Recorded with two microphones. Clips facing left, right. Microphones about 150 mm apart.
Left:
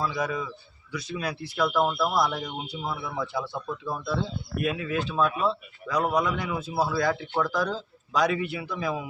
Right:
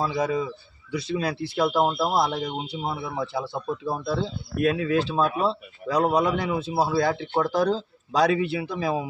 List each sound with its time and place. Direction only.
0.0 s speech: 30° right (ahead or behind)